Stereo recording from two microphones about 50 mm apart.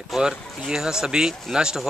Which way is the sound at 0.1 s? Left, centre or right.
Centre.